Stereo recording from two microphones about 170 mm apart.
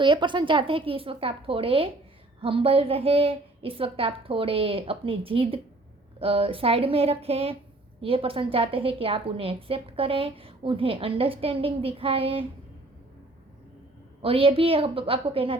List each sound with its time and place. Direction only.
0.0 s a woman's voice: 30° right (ahead or behind)
14.2 s a woman's voice: 35° right (ahead or behind)